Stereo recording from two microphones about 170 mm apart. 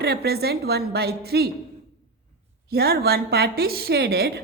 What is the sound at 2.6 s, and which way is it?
A woman's voice, 65° right (ahead or behind).